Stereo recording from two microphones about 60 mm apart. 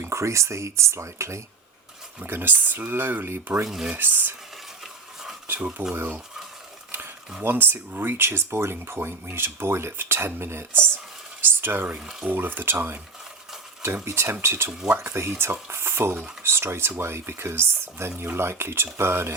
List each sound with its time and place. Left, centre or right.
0.0 s speech: right
2.2 s speech: right
3.2 s speech: right
3.9 s speech: right
4.8 s stir: centre
5.5 s speech: right
7.4 s speech: right
11.9 s speech: centre
12.3 s speech: right